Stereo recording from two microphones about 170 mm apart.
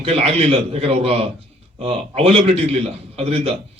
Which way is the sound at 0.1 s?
35° right (ahead or behind).